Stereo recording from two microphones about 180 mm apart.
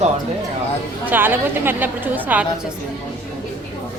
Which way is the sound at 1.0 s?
10° right (ahead or behind).